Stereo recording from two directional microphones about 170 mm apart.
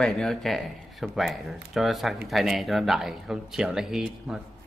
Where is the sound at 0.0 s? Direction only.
Centre (ahead or behind).